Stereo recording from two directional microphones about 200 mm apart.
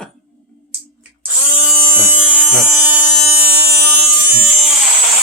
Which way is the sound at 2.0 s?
5° right (ahead or behind).